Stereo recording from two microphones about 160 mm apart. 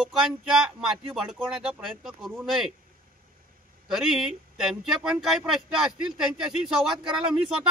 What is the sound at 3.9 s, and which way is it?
Speech, centre (ahead or behind).